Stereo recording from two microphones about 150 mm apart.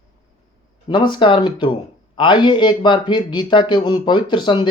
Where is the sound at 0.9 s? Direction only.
30° left (ahead or behind).